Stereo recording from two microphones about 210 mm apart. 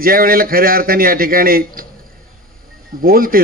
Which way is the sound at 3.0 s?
45° right (ahead or behind).